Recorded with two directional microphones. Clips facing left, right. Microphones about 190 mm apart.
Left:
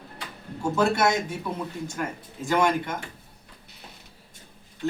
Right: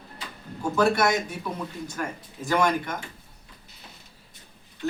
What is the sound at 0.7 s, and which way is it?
Speech, 25° left (ahead or behind).